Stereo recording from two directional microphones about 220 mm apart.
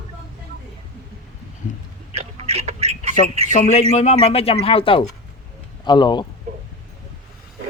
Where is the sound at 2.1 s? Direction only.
30° right (ahead or behind).